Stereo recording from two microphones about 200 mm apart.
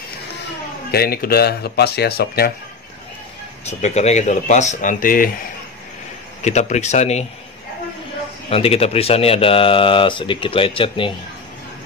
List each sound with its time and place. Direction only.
0.9 s speech: 50° left (ahead or behind)
3.6 s speech: 35° left (ahead or behind)
6.4 s speech: 35° left (ahead or behind)
8.5 s speech: 30° left (ahead or behind)